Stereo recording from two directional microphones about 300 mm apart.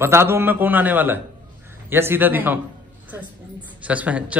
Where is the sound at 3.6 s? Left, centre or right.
Centre.